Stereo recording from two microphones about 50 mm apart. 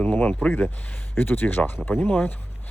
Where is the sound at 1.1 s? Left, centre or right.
Left.